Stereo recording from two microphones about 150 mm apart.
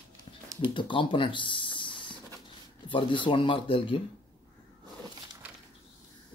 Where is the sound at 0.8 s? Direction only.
35° left (ahead or behind).